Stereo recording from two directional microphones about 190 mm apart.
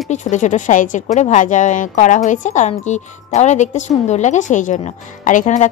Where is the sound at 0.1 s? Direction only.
40° left (ahead or behind).